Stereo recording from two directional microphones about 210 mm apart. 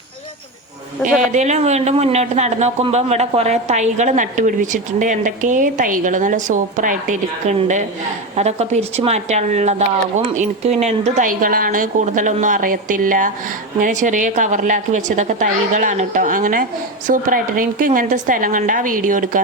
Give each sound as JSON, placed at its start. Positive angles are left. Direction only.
{"t": 1.0, "sound": "a woman's voice", "side_deg": -35}